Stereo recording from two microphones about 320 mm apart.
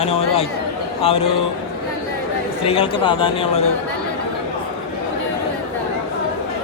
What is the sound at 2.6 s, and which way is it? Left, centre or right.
Speech, centre.